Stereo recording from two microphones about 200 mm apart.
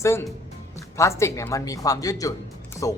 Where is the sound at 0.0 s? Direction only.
15° left (ahead or behind).